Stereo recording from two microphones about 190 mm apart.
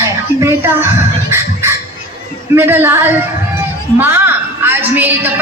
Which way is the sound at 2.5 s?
10° right (ahead or behind).